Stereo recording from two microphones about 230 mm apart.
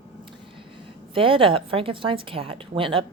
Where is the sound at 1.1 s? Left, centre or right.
Right.